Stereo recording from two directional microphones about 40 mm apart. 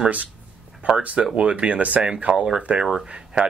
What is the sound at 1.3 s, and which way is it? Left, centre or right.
Speech, right.